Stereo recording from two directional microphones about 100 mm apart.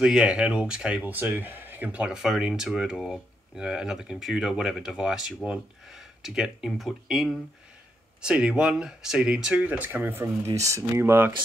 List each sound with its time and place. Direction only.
0.0 s speech: 5° right (ahead or behind)
10.2 s speech: 35° right (ahead or behind)